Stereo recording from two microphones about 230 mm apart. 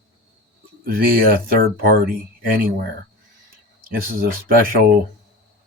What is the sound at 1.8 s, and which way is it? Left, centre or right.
Speech, right.